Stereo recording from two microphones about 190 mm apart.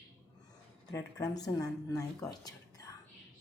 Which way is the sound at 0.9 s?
20° left (ahead or behind).